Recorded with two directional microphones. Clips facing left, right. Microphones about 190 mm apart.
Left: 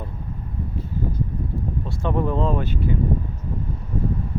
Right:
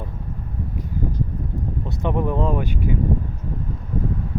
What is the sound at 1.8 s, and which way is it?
Speech, 20° right (ahead or behind).